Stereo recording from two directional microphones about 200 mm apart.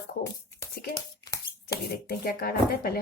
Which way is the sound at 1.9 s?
50° left (ahead or behind).